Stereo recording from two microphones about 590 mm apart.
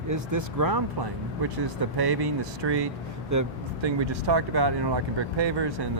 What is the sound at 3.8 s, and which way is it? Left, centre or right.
Speech, right.